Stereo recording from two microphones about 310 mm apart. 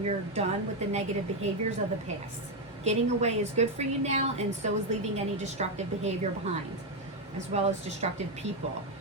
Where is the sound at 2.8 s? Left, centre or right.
Right.